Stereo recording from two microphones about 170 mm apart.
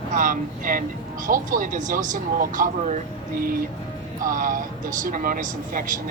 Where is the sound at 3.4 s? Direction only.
60° right (ahead or behind).